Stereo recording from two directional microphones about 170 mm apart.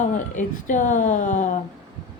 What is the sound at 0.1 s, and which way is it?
A woman's voice, 50° left (ahead or behind).